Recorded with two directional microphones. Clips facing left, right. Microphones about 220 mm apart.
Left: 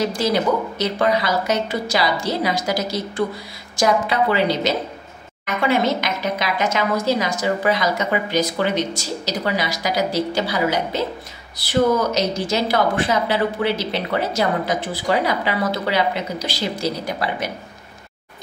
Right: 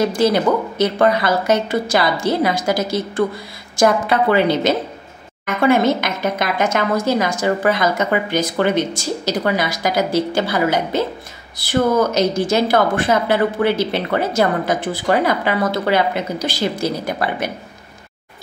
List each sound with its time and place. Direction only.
0.0 s a woman's voice: 55° right (ahead or behind)